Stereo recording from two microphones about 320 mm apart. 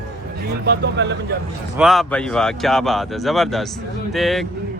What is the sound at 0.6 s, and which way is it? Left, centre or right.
Speech, right.